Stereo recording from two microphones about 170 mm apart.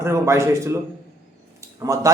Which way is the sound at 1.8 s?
20° right (ahead or behind).